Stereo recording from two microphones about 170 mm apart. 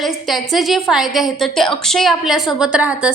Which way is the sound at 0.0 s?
Centre (ahead or behind).